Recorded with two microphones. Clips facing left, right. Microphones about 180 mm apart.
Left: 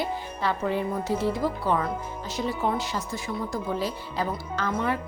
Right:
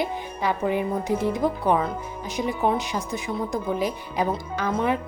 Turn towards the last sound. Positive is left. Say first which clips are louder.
# right 3 dB
turn(degrees=-15)  # may be behind; listen again after turning